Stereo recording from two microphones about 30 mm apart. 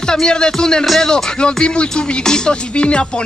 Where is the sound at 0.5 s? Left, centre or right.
Left.